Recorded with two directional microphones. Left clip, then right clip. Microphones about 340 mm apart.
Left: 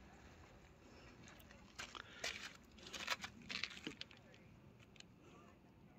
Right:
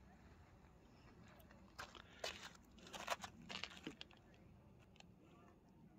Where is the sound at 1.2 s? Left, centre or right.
Centre.